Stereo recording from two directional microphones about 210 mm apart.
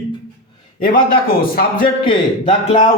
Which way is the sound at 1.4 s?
45° left (ahead or behind).